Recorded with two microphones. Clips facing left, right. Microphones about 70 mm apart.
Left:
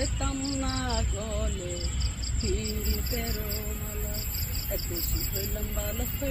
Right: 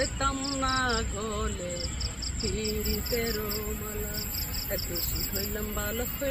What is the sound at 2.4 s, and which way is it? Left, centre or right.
Cricket, left.